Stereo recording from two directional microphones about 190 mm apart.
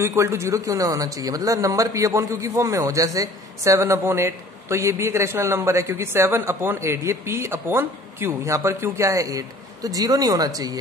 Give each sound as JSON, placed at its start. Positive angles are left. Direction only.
{"t": 0.0, "sound": "speech", "side_deg": -15}